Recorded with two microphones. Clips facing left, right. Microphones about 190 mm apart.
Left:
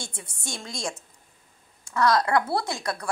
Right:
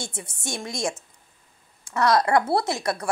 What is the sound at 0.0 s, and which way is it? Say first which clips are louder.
A woman's voice: right 4 dB; 20° right (ahead or behind).